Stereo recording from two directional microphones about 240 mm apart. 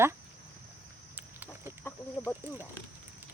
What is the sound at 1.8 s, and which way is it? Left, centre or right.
Chicken, centre.